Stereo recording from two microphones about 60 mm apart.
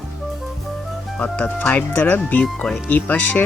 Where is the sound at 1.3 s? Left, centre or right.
Left.